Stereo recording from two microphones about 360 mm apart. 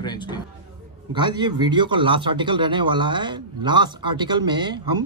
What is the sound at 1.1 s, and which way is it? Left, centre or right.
Speech, centre.